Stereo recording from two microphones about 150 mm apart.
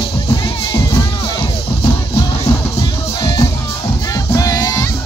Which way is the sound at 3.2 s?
25° left (ahead or behind).